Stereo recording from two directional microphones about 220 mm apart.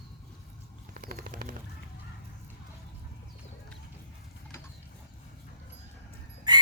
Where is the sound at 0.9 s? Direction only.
40° right (ahead or behind).